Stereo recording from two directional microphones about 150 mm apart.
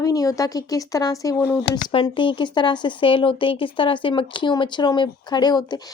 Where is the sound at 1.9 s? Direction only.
35° left (ahead or behind).